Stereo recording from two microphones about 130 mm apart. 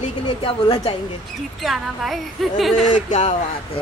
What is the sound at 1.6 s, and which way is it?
Speech, centre (ahead or behind).